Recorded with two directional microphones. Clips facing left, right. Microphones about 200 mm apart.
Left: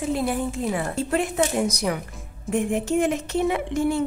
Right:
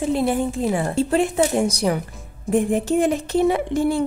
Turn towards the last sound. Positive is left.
turn(degrees=-35)  # may be behind; listen again after turning